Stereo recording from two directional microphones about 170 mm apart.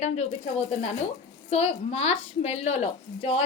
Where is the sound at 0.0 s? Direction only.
40° left (ahead or behind).